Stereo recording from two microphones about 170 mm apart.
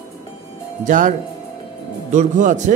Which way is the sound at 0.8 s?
50° right (ahead or behind).